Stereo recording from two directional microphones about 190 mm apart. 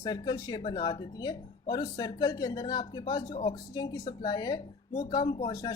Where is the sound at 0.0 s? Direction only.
20° left (ahead or behind).